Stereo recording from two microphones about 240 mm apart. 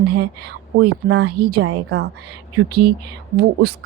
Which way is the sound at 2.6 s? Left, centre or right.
Right.